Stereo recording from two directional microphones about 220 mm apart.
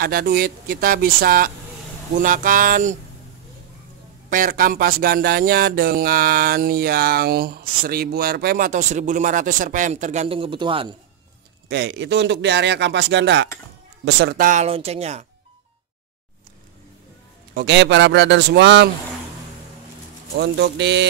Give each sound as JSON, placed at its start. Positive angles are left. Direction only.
{"t": 0.0, "sound": "speech", "side_deg": -45}
{"t": 4.3, "sound": "speech", "side_deg": -40}
{"t": 11.7, "sound": "speech", "side_deg": -50}
{"t": 17.6, "sound": "speech", "side_deg": -50}
{"t": 20.3, "sound": "speech", "side_deg": -50}